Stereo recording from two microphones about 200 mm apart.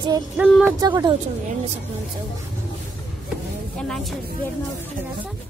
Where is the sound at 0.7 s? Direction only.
20° right (ahead or behind).